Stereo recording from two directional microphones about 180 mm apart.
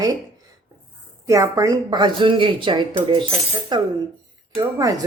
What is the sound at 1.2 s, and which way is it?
A woman's voice, 20° right (ahead or behind).